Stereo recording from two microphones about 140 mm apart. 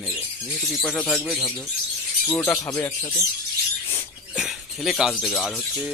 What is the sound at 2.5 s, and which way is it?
Speech, 20° left (ahead or behind).